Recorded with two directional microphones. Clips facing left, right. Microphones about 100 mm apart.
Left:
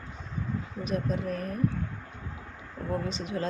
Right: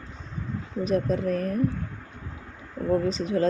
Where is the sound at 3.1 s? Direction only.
35° right (ahead or behind).